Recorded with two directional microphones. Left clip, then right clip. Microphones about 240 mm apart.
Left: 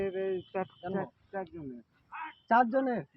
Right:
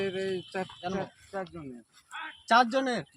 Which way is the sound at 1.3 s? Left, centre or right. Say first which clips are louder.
Right 2 dB; right.